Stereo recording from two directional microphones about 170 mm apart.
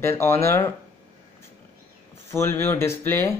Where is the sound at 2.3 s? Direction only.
15° left (ahead or behind).